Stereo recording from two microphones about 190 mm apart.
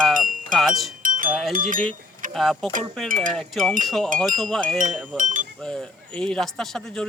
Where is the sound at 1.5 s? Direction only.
45° right (ahead or behind).